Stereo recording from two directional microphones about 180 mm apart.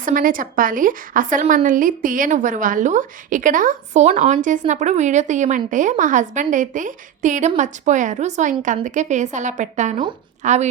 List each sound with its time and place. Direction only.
0.0 s a woman's voice: 50° right (ahead or behind)